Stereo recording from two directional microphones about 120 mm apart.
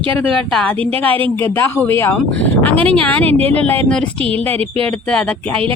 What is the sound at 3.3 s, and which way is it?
Speech, 55° right (ahead or behind).